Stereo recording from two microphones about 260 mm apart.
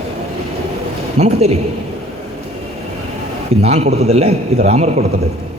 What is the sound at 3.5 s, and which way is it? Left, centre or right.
A man's voice, right.